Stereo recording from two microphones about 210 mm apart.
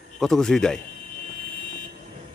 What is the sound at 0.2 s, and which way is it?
Speech, centre (ahead or behind).